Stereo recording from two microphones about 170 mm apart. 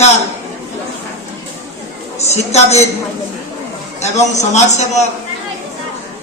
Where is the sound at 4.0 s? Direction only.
40° left (ahead or behind).